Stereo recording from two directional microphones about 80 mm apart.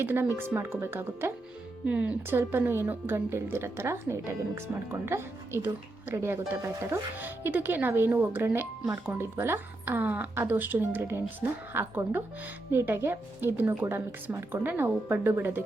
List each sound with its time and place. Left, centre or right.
0.0 s a woman's voice: right
1.9 s speech: centre
2.3 s a woman's voice: right
7.2 s a woman's voice: right